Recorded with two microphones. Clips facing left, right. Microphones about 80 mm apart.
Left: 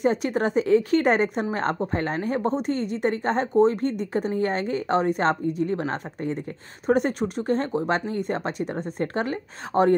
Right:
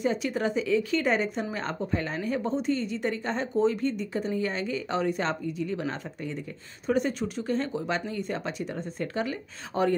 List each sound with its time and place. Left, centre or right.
0.0 s speech: left
6.9 s speech: left